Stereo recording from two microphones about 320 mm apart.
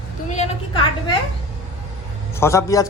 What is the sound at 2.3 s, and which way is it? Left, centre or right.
Speech, centre.